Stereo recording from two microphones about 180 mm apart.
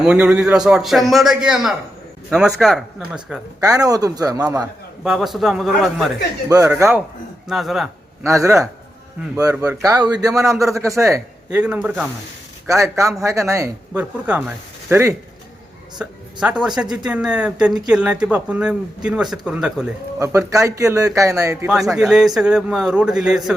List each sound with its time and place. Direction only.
0.0 s speech: 5° right (ahead or behind)
3.6 s a man's voice: 20° right (ahead or behind)
5.0 s speech: centre (ahead or behind)
6.7 s speech: 15° right (ahead or behind)
7.4 s speech: centre (ahead or behind)
8.2 s a man's voice: 15° right (ahead or behind)
20.1 s speech: 15° right (ahead or behind)
21.7 s speech: centre (ahead or behind)